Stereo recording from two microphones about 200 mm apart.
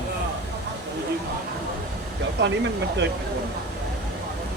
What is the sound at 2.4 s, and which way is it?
Speech, 60° right (ahead or behind).